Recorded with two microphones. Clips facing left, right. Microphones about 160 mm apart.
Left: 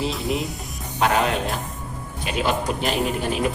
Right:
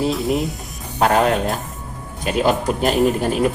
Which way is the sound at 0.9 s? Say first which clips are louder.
Right 5 dB; 45° right (ahead or behind).